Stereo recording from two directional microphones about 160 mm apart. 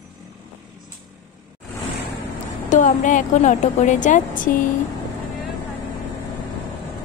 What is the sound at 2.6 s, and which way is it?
A woman's voice, 55° left (ahead or behind).